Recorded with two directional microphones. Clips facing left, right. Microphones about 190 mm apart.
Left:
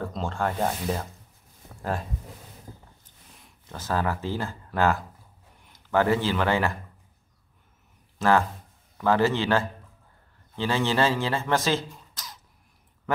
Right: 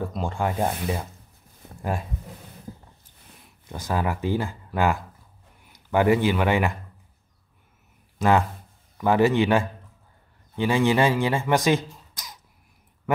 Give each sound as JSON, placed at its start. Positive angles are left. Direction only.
{"t": 0.0, "sound": "speech", "side_deg": -15}
{"t": 3.6, "sound": "a man's voice", "side_deg": -15}
{"t": 8.2, "sound": "speech", "side_deg": -15}